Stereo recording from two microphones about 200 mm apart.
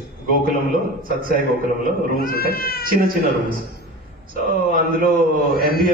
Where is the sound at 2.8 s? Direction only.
45° right (ahead or behind).